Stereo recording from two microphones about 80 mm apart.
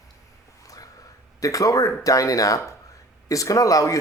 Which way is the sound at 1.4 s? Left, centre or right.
Left.